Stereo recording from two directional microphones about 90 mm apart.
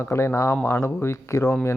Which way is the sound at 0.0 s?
30° left (ahead or behind).